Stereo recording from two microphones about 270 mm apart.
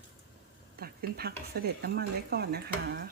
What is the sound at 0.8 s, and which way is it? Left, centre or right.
Speech, right.